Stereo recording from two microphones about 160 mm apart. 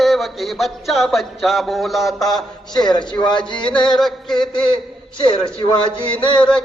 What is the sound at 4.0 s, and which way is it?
Music, centre (ahead or behind).